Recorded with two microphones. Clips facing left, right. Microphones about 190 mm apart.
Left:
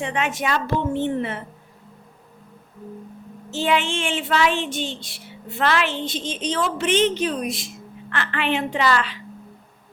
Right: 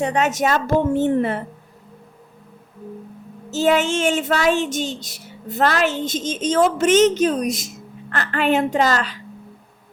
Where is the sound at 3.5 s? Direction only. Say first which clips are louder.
Right 5 dB; 45° right (ahead or behind).